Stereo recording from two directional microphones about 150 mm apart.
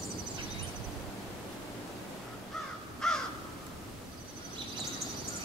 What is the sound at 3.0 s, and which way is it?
Crow, centre (ahead or behind).